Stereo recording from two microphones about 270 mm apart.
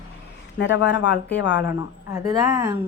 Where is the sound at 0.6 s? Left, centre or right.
Left.